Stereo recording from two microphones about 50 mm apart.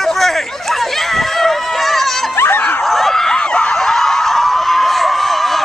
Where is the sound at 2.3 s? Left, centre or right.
Left.